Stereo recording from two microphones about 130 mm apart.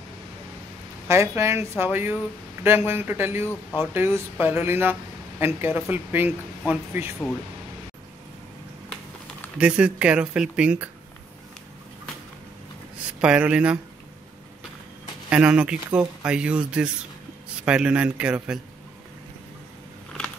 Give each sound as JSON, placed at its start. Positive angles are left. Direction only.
{"t": 1.0, "sound": "speech", "side_deg": -20}
{"t": 9.6, "sound": "speech", "side_deg": -10}
{"t": 13.2, "sound": "speech", "side_deg": -10}
{"t": 15.2, "sound": "speech", "side_deg": -10}